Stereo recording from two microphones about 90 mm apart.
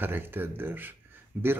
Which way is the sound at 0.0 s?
25° right (ahead or behind).